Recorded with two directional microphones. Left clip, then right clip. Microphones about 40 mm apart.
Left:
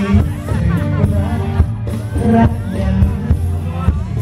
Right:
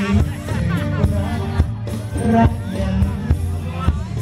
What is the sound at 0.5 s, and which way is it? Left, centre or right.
Music, right.